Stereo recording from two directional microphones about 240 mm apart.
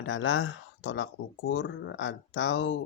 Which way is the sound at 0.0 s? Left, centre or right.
Left.